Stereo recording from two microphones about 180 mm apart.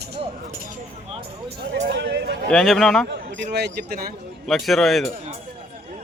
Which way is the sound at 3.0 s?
75° right (ahead or behind).